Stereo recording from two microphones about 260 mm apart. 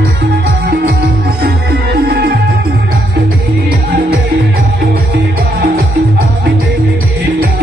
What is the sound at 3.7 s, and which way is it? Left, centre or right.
Music, right.